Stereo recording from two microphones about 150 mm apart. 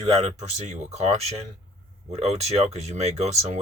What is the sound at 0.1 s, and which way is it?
Speech, 50° right (ahead or behind).